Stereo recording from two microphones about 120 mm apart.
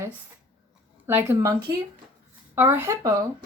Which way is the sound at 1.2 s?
25° right (ahead or behind).